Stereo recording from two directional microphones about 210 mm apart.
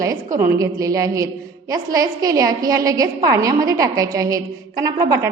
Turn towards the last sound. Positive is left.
turn(degrees=-15)  # may be behind; listen again after turning